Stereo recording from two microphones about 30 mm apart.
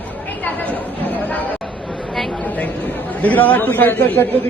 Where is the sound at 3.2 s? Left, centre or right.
Left.